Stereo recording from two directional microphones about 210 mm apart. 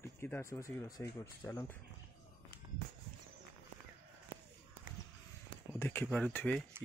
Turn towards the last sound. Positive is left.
turn(degrees=10)  # may be behind; listen again after turning